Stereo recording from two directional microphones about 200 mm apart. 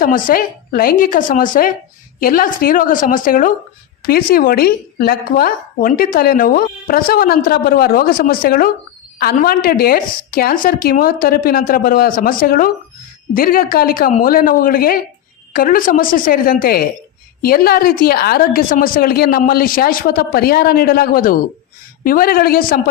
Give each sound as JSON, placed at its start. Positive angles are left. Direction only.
{"t": 0.0, "sound": "a woman's voice", "side_deg": 45}